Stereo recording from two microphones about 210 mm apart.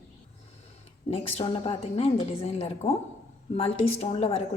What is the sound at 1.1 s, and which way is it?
A woman's voice, 25° left (ahead or behind).